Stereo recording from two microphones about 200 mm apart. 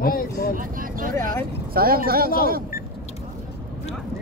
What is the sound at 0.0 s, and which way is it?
Speech, 45° left (ahead or behind).